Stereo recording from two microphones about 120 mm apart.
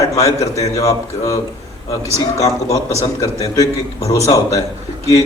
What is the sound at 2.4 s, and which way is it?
A man's voice, 25° left (ahead or behind).